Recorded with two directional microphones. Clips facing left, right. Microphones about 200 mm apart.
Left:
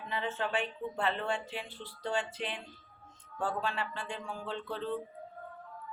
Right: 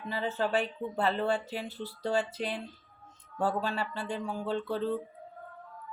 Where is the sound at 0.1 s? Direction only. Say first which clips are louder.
Right 4 dB; 35° right (ahead or behind).